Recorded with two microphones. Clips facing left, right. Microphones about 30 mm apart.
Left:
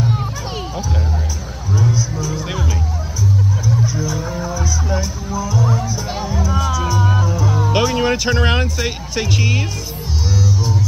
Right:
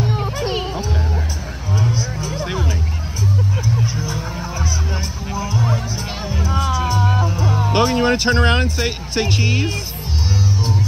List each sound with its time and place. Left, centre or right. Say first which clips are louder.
0.0 s children playing: left 1 dB; centre
0.4 s music: right 3 dB; right
1.8 s vehicle: left 3 dB; right
3.6 s music: left 2 dB; right
7.5 s music: right 1 dB; centre
8.8 s speech: right 1 dB; centre